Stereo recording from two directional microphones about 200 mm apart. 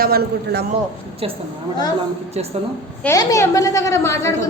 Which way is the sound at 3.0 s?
15° left (ahead or behind).